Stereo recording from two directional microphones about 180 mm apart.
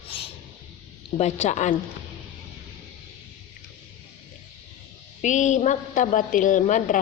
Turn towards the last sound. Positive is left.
turn(degrees=45)  # may be behind; listen again after turning